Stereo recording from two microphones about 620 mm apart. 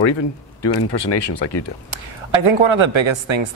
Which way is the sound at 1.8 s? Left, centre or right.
Right.